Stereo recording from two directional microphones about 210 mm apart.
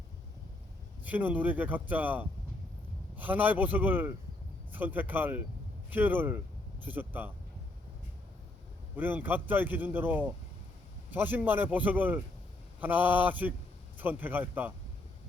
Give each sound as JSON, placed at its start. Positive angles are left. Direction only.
{"t": 1.0, "sound": "a man's voice", "side_deg": -5}
{"t": 9.0, "sound": "a man's voice", "side_deg": -10}